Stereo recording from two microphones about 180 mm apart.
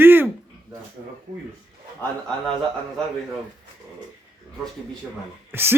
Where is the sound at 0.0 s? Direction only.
10° right (ahead or behind).